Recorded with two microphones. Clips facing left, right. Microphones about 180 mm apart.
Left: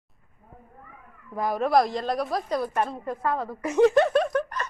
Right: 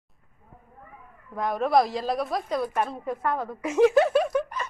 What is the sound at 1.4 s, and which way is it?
A woman's voice, 5° left (ahead or behind).